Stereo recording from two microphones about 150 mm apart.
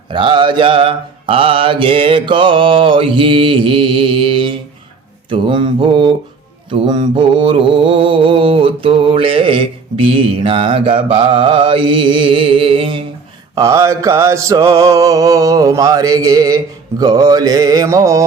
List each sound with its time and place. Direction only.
0.1 s mantra: 35° right (ahead or behind)
13.6 s mantra: 20° right (ahead or behind)